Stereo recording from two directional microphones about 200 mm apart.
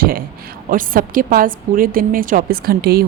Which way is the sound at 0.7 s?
45° right (ahead or behind).